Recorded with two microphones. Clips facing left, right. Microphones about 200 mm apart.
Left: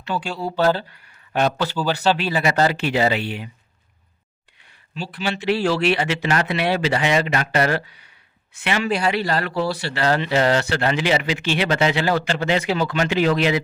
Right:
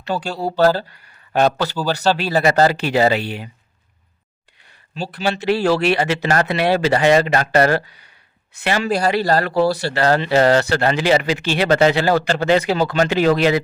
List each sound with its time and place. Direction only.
0.0 s speech: 40° right (ahead or behind)
4.9 s speech: 40° right (ahead or behind)